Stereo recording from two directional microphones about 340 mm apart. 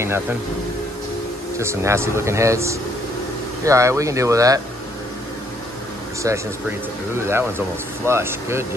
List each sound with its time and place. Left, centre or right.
0.0 s speech: centre
1.6 s speech: centre
6.2 s speech: centre